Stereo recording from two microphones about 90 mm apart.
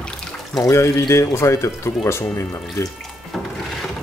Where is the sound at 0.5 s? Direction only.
35° left (ahead or behind).